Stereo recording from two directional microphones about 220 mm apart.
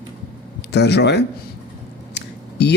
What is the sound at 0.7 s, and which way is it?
Speech, 50° left (ahead or behind).